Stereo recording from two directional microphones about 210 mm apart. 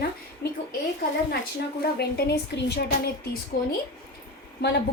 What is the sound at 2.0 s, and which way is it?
Speech, 50° left (ahead or behind).